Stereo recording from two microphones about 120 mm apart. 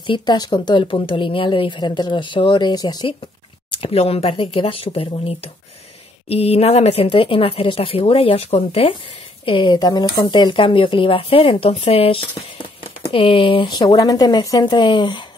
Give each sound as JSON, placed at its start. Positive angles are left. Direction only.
{"t": 0.0, "sound": "speech", "side_deg": 40}
{"t": 3.8, "sound": "speech", "side_deg": 55}
{"t": 7.1, "sound": "speech", "side_deg": 50}
{"t": 9.5, "sound": "speech", "side_deg": 40}
{"t": 13.7, "sound": "speech", "side_deg": 30}